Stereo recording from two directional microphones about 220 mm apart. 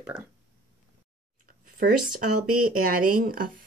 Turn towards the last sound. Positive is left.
turn(degrees=-40)  # may be behind; listen again after turning